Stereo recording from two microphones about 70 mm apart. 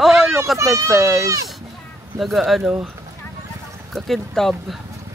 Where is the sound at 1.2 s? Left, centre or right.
Right.